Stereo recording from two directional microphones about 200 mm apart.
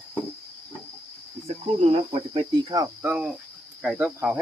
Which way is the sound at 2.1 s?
25° right (ahead or behind).